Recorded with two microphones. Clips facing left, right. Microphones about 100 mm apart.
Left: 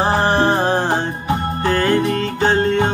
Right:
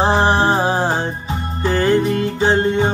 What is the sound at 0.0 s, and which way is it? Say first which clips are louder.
Music: right 1 dB; 20° right (ahead or behind).